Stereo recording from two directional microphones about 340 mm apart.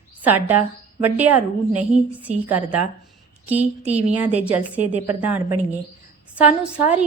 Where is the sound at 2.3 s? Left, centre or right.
Right.